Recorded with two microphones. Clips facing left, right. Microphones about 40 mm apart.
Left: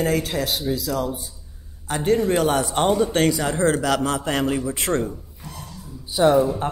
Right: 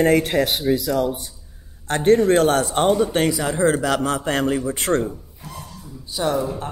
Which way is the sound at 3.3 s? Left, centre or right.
Centre.